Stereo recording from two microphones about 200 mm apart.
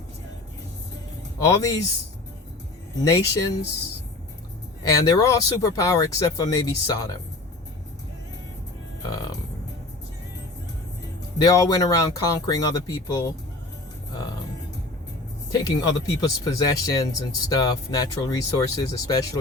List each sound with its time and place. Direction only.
1.5 s speech: 15° left (ahead or behind)
3.0 s speech: 15° left (ahead or behind)
4.8 s speech: 20° left (ahead or behind)
9.0 s music: 20° left (ahead or behind)
11.3 s speech: 20° left (ahead or behind)
15.5 s speech: 15° left (ahead or behind)